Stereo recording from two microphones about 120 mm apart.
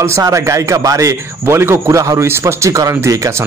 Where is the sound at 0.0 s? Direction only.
25° right (ahead or behind).